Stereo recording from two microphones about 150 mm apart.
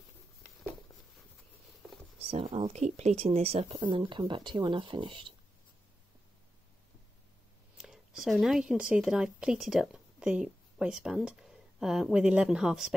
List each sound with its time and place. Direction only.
2.3 s speech: 40° right (ahead or behind)
7.7 s a woman's voice: 5° right (ahead or behind)